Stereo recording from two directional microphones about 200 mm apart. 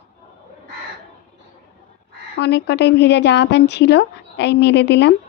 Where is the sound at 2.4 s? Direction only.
55° left (ahead or behind).